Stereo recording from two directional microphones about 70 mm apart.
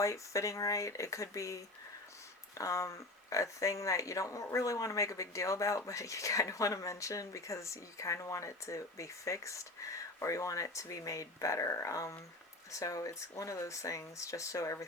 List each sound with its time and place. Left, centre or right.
0.0 s speech: left